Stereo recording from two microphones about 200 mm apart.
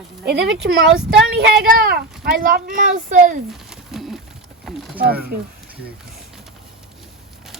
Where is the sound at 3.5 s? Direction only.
Centre (ahead or behind).